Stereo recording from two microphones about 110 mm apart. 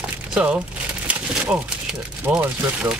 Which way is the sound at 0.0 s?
10° right (ahead or behind).